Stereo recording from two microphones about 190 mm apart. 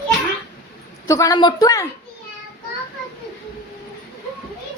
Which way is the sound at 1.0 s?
15° left (ahead or behind).